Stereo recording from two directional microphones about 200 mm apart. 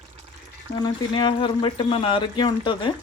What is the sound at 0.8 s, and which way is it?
Speech, 25° left (ahead or behind).